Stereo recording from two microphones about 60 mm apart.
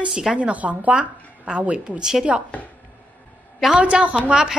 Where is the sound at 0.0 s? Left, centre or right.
Centre.